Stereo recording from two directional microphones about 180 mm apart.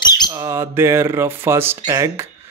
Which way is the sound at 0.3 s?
15° right (ahead or behind).